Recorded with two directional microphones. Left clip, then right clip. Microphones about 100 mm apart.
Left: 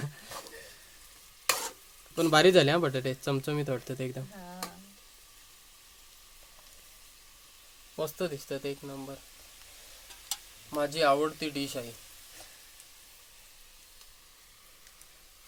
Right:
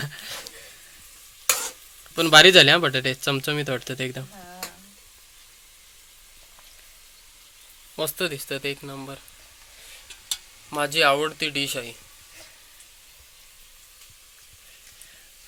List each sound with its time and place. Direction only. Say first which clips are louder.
0.0 s a sound: right 10 dB; 5° left (ahead or behind)
2.1 s speech: right 9 dB; 5° left (ahead or behind)
7.9 s speech: right 6 dB; 5° right (ahead or behind)
8.9 s speech: right 5 dB; 20° right (ahead or behind)
10.7 s speech: right 6 dB; 15° right (ahead or behind)